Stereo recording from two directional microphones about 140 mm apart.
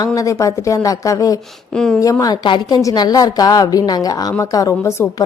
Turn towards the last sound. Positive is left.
turn(degrees=20)  # may be behind; listen again after turning